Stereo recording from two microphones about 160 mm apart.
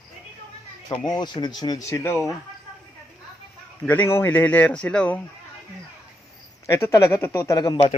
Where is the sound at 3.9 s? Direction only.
15° left (ahead or behind).